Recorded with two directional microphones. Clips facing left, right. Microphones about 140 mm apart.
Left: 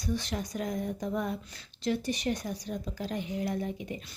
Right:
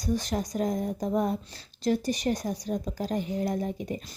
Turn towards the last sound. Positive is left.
turn(degrees=-40)  # may be behind; listen again after turning